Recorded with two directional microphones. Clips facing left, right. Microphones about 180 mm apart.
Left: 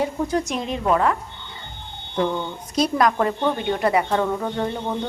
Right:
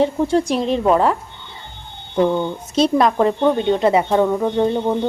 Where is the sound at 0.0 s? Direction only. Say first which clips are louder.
Right 6 dB; 30° right (ahead or behind).